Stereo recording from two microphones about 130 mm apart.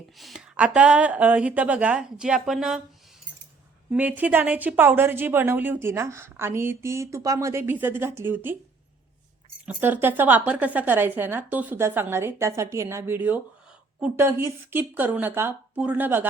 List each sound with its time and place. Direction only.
0.2 s a woman's voice: centre (ahead or behind)
3.9 s a woman's voice: 15° right (ahead or behind)
9.6 s a woman's voice: 15° right (ahead or behind)